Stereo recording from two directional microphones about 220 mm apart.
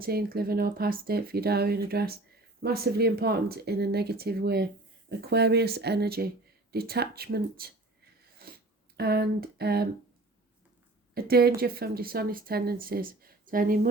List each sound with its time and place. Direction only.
0.0 s speech: 45° right (ahead or behind)
8.4 s a sound: 40° right (ahead or behind)
9.0 s speech: 45° right (ahead or behind)
11.1 s speech: 45° right (ahead or behind)